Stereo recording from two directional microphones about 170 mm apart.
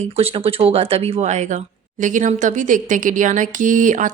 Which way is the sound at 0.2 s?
35° right (ahead or behind).